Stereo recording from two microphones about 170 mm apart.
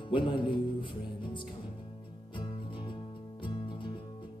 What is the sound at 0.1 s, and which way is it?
Speech, 30° left (ahead or behind).